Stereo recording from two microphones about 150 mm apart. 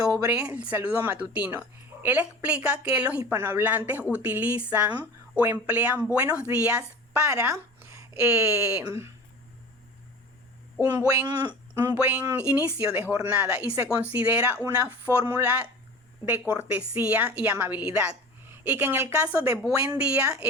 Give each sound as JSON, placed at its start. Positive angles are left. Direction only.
{"t": 0.1, "sound": "a woman's voice", "side_deg": -20}
{"t": 7.3, "sound": "speech", "side_deg": -20}
{"t": 10.8, "sound": "speech", "side_deg": -20}
{"t": 11.7, "sound": "a woman's voice", "side_deg": -15}